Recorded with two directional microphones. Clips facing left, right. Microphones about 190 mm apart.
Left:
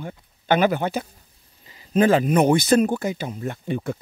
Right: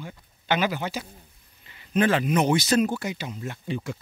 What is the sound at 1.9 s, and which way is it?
Speech, 40° left (ahead or behind).